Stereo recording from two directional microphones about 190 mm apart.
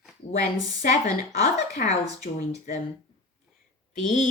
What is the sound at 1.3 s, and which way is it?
Speech, 35° left (ahead or behind).